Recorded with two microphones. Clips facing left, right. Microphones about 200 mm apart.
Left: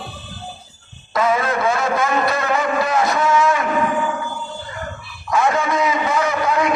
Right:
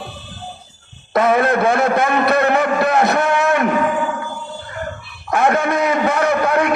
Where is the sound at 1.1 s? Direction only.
60° right (ahead or behind).